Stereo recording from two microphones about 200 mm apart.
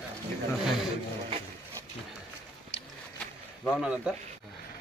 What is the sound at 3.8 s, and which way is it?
Speech, 5° right (ahead or behind).